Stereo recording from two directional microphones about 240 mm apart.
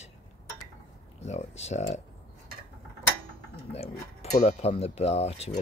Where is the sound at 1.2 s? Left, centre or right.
Left.